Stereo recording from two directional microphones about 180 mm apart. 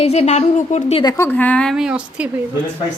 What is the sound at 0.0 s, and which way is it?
Speech, 35° left (ahead or behind).